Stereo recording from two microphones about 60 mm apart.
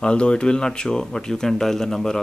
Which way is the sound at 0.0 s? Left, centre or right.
Centre.